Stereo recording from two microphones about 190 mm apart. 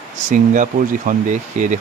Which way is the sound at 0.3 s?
40° right (ahead or behind).